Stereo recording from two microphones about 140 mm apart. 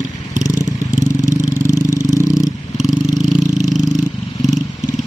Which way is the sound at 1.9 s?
25° left (ahead or behind).